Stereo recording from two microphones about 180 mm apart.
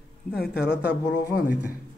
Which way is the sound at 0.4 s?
65° left (ahead or behind).